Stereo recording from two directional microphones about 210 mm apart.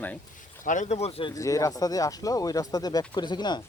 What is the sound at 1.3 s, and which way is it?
Speech, 15° left (ahead or behind).